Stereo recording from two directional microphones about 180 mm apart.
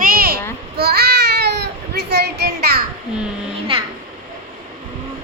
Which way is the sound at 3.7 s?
30° right (ahead or behind).